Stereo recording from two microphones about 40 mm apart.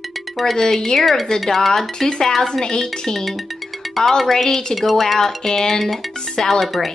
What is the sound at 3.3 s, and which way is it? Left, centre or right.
Music, centre.